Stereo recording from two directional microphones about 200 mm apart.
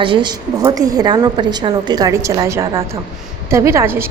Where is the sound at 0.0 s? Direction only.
25° right (ahead or behind).